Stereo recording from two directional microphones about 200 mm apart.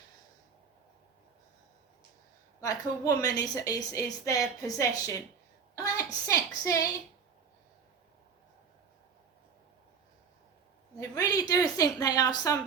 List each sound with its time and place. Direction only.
2.6 s a woman's voice: 15° left (ahead or behind)
5.7 s a sound: 15° left (ahead or behind)
6.7 s a woman's voice: 20° left (ahead or behind)
11.1 s a woman's voice: 20° left (ahead or behind)